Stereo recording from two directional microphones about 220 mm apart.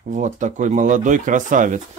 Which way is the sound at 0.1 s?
35° right (ahead or behind).